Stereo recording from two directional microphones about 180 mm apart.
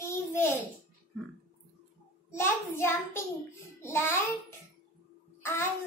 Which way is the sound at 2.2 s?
15° left (ahead or behind).